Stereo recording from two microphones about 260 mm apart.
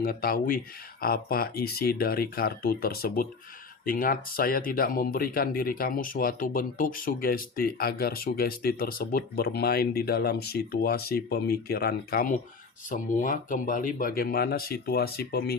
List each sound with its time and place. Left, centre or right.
0.0 s speech: left